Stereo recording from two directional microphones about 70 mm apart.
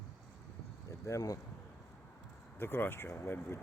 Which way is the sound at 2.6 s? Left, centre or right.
Left.